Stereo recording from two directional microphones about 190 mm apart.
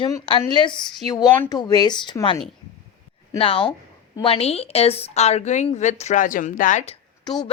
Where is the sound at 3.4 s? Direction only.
30° left (ahead or behind).